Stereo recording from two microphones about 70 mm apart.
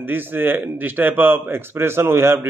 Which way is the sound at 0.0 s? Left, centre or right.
Right.